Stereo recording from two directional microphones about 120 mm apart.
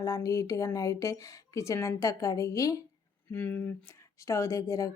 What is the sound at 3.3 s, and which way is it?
A woman's voice, 15° left (ahead or behind).